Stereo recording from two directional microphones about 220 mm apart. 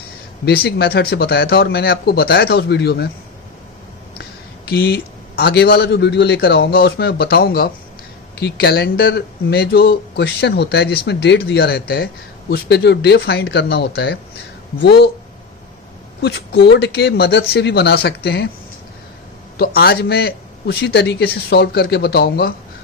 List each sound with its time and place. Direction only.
0.4 s speech: 45° left (ahead or behind)
4.7 s speech: 45° left (ahead or behind)
16.2 s speech: 50° left (ahead or behind)
19.5 s speech: 45° left (ahead or behind)